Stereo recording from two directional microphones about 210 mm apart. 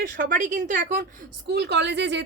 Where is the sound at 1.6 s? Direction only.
55° right (ahead or behind).